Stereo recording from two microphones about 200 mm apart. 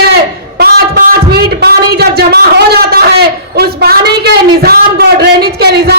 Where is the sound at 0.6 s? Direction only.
50° right (ahead or behind).